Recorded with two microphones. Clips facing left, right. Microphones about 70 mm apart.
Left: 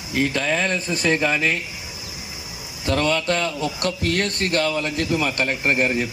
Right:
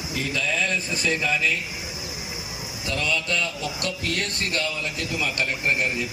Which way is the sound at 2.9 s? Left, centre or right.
Left.